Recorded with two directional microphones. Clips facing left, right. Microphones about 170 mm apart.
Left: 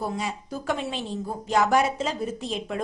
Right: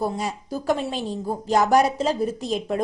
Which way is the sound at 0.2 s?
40° right (ahead or behind).